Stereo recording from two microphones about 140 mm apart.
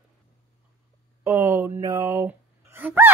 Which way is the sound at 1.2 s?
20° right (ahead or behind).